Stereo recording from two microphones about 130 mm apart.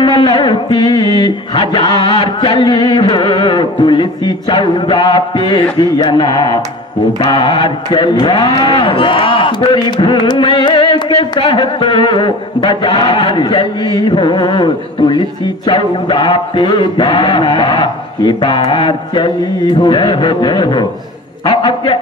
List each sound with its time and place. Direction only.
0.0 s a man's voice: 35° left (ahead or behind)